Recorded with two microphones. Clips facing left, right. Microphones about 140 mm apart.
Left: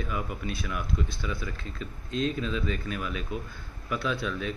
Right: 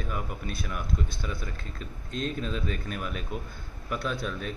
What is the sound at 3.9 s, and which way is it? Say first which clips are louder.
Speech: left 1 dB; 45° right (ahead or behind).